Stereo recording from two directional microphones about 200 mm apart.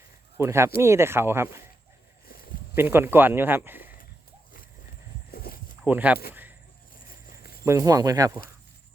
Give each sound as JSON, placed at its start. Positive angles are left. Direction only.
{"t": 0.3, "sound": "speech", "side_deg": -15}
{"t": 2.7, "sound": "speech", "side_deg": -10}
{"t": 5.3, "sound": "walk", "side_deg": 50}
{"t": 5.8, "sound": "speech", "side_deg": -5}
{"t": 7.6, "sound": "speech", "side_deg": -15}